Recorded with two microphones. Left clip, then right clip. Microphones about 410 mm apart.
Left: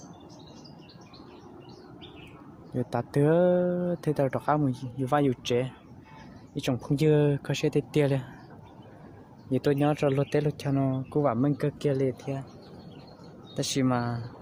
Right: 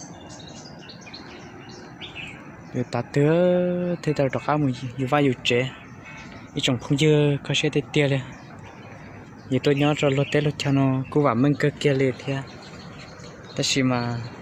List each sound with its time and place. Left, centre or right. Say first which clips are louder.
2.7 s speech: right 4 dB; left
9.5 s speech: right 4 dB; left
13.6 s speech: right 5 dB; left